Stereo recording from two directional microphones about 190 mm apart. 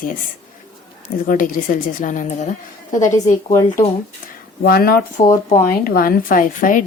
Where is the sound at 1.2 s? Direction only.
45° left (ahead or behind).